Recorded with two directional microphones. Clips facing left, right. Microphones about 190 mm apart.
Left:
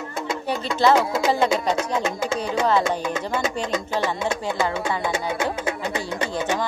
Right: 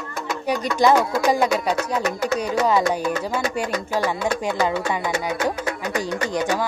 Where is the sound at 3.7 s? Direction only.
20° left (ahead or behind).